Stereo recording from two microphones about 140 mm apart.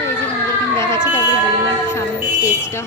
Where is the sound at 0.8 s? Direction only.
20° left (ahead or behind).